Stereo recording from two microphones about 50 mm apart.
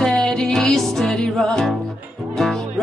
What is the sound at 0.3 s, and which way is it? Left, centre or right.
Music, centre.